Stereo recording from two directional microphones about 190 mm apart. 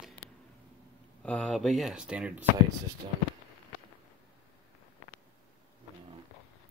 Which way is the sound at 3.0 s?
25° right (ahead or behind).